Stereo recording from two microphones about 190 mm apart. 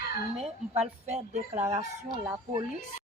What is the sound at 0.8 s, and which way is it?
Speech, 35° right (ahead or behind).